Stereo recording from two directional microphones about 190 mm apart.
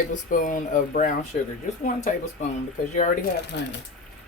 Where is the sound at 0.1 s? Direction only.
45° left (ahead or behind).